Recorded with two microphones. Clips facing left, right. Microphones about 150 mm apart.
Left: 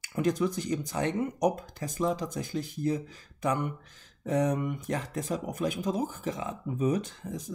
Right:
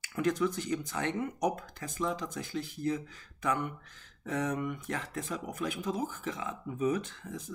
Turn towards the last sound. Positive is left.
turn(degrees=40)  # may be behind; listen again after turning